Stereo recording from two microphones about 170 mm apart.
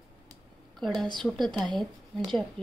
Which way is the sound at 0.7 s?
Centre (ahead or behind).